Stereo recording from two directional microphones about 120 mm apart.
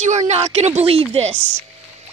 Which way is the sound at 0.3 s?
65° right (ahead or behind).